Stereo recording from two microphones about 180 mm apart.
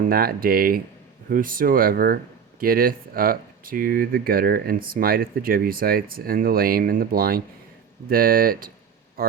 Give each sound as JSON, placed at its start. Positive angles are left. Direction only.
{"t": 0.1, "sound": "speech", "side_deg": -55}